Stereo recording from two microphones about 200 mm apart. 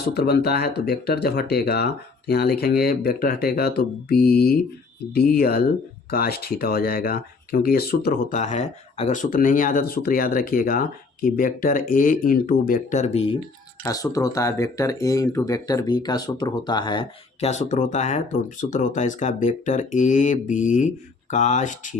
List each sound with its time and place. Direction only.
0.0 s speech: 55° left (ahead or behind); by 13.3 s 35° left (ahead or behind)
13.8 s speech: 15° left (ahead or behind); by 21.9 s 40° left (ahead or behind)